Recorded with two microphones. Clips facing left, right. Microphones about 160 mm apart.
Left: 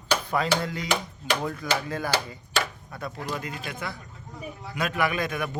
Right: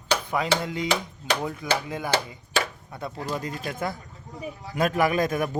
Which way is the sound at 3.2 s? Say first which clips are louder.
Right 4 dB; 40° right (ahead or behind).